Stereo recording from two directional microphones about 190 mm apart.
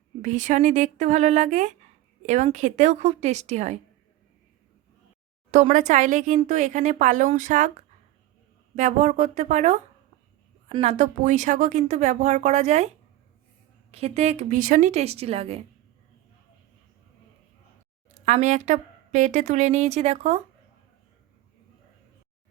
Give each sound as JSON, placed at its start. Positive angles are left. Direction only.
{"t": 0.2, "sound": "speech", "side_deg": -40}
{"t": 5.5, "sound": "speech", "side_deg": -40}
{"t": 8.7, "sound": "speech", "side_deg": -40}
{"t": 13.9, "sound": "speech", "side_deg": -35}
{"t": 18.3, "sound": "speech", "side_deg": -40}